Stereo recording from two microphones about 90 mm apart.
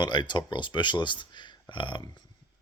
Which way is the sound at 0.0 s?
55° left (ahead or behind).